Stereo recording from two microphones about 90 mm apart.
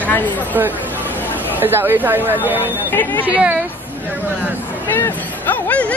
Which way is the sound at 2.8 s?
20° left (ahead or behind).